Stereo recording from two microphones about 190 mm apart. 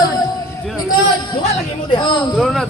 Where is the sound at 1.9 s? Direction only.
25° left (ahead or behind).